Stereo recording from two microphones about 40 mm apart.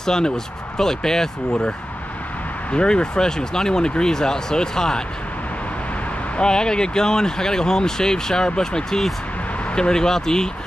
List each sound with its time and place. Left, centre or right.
0.0 s speech: centre
2.7 s speech: left
6.3 s speech: left